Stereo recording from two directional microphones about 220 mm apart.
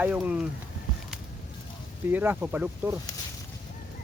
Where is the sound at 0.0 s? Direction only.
5° right (ahead or behind).